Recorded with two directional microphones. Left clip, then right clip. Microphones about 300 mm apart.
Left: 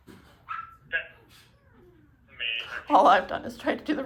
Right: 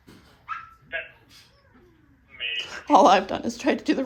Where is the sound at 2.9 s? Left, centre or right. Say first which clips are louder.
Right 3 dB; centre.